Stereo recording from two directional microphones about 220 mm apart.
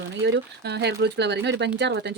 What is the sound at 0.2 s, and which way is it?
A woman's voice, 50° right (ahead or behind).